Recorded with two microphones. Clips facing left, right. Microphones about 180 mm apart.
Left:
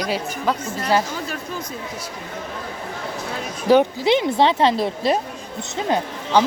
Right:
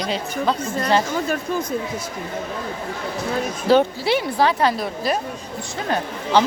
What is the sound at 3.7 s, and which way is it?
Speech, 15° left (ahead or behind).